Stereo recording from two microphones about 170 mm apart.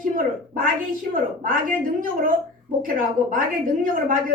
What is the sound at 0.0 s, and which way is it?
A woman's voice, 55° right (ahead or behind).